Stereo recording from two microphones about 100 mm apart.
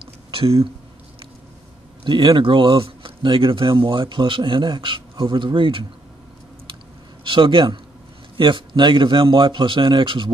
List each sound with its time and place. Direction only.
0.3 s speech: 70° right (ahead or behind)
2.0 s a man's voice: 55° right (ahead or behind)
7.2 s a man's voice: 55° right (ahead or behind)